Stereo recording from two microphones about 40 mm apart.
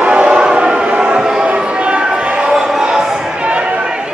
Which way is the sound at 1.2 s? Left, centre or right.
Centre.